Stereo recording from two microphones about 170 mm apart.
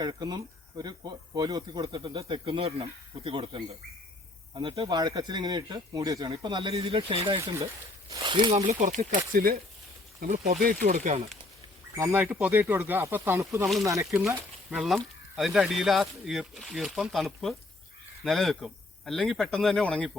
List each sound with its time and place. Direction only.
0.0 s speech: 25° right (ahead or behind)
8.5 s speech: 45° right (ahead or behind)
10.2 s speech: 45° right (ahead or behind)
11.9 s speech: 15° right (ahead or behind); by 20.1 s 5° left (ahead or behind)